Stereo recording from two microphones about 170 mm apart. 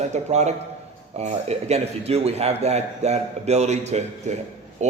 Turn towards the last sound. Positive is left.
turn(degrees=-40)  # may be behind; listen again after turning